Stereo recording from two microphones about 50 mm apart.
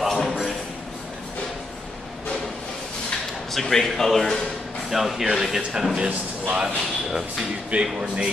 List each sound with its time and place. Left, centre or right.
0.0 s a sound: centre
3.5 s a man's voice: centre
6.0 s a man's voice: right
7.7 s speech: right